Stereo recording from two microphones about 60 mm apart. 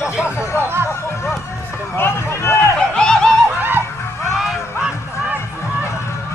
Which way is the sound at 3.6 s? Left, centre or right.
Right.